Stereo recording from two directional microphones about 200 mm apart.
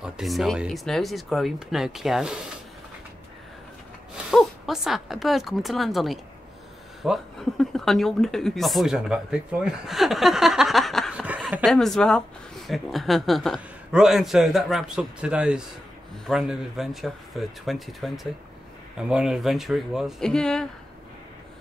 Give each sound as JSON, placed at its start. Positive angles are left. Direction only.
{"t": 0.0, "sound": "a man's voice", "side_deg": 0}
{"t": 4.2, "sound": "a man's voice", "side_deg": 0}